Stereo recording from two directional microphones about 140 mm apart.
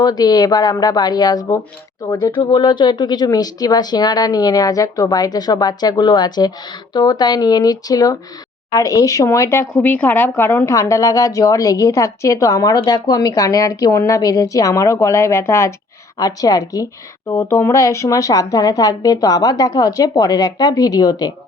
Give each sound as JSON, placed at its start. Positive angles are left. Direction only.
{"t": 0.0, "sound": "a woman's voice", "side_deg": 30}